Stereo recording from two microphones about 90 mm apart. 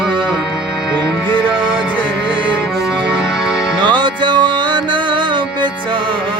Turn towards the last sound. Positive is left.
turn(degrees=-60)  # may be behind; listen again after turning